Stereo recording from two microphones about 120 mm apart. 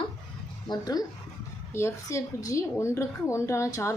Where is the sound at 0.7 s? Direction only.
30° left (ahead or behind).